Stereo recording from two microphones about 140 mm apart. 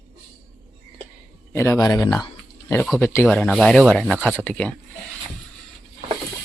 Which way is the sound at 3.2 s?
5° left (ahead or behind).